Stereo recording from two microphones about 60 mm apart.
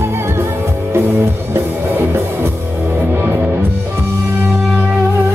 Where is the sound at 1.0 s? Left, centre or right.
Right.